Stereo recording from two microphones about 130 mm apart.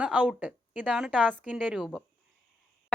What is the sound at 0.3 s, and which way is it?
Speech, 5° right (ahead or behind).